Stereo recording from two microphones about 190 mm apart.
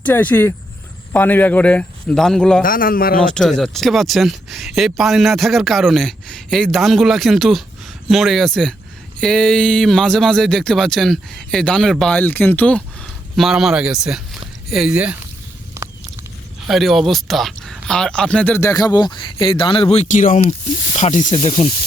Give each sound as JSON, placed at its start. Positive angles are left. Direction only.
{"t": 0.0, "sound": "speech", "side_deg": 10}
{"t": 2.6, "sound": "a man's voice", "side_deg": 45}
{"t": 3.2, "sound": "speech", "side_deg": 5}
{"t": 15.8, "sound": "walk", "side_deg": -15}
{"t": 16.6, "sound": "speech", "side_deg": 0}